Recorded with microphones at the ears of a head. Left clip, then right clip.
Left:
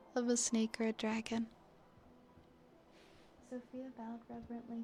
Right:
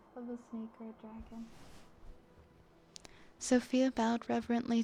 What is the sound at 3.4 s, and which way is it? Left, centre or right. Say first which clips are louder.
Speech: right 18 dB; right.